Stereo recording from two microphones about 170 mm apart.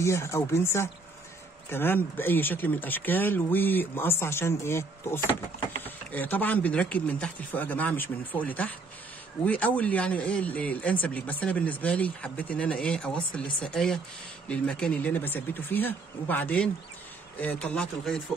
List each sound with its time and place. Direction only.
0.0 s speech: 15° left (ahead or behind)